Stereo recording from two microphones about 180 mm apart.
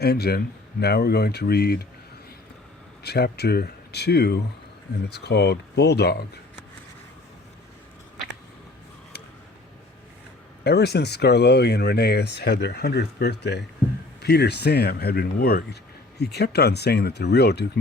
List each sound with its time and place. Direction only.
0.0 s speech: 60° left (ahead or behind)
3.0 s speech: 65° left (ahead or behind)
10.6 s speech: 65° left (ahead or behind)